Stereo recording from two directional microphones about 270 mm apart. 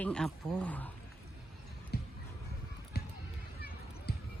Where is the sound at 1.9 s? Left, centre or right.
Left.